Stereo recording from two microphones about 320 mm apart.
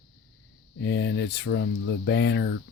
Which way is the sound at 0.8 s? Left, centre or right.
Left.